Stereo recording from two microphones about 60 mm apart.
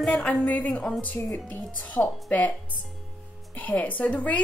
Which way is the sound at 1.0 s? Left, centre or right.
Left.